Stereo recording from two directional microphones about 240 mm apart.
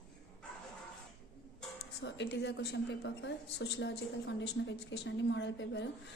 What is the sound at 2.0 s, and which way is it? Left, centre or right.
A woman's voice, left.